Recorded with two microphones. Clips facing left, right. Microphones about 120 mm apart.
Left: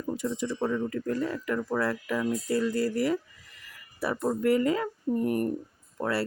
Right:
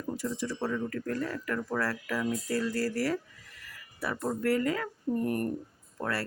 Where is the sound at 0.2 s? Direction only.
20° left (ahead or behind).